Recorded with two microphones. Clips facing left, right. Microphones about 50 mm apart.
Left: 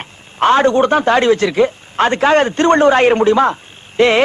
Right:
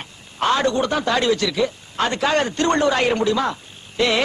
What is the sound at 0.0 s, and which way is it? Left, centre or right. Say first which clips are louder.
Speech: left 8 dB; left.